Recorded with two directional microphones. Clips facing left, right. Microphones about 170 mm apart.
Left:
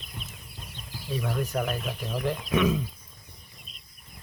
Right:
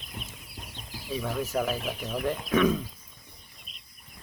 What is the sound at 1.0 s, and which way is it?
Speech, centre (ahead or behind).